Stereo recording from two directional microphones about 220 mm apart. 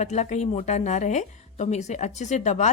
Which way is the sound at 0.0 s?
30° left (ahead or behind).